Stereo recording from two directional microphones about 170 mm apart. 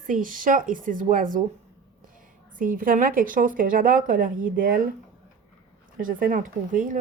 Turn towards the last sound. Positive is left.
turn(degrees=-50)  # may be behind; listen again after turning